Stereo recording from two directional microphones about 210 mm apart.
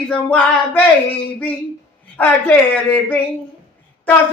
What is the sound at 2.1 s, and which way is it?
Speech, 10° left (ahead or behind).